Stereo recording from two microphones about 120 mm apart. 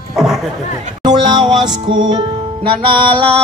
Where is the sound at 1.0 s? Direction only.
40° right (ahead or behind).